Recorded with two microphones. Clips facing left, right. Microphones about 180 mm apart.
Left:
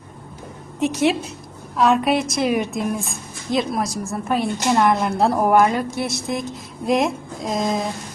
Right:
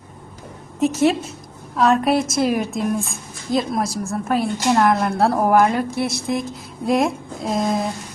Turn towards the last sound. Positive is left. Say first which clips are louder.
# right 1 dB
turn(degrees=0)  # may be behind; listen again after turning